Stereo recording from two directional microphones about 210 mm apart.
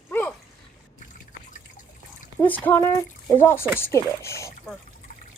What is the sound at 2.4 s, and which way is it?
A child's voice, 10° left (ahead or behind).